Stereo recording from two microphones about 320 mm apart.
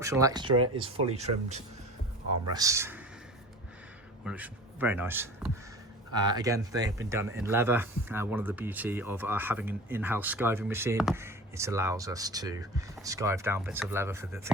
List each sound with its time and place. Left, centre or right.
0.0 s speech: centre
4.3 s speech: centre